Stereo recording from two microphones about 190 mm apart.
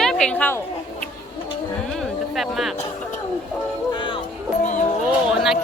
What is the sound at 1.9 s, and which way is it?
Music, centre (ahead or behind).